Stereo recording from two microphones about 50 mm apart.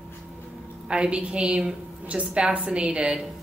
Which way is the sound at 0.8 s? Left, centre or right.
Right.